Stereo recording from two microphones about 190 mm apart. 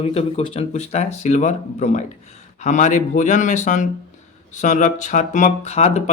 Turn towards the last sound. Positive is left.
turn(degrees=35)  # may be behind; listen again after turning